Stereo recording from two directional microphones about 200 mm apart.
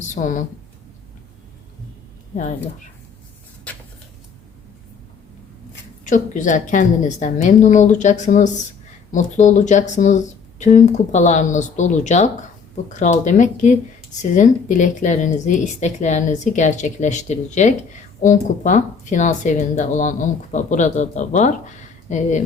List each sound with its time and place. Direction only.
0.1 s a woman's voice: 40° left (ahead or behind)
6.1 s speech: 40° left (ahead or behind)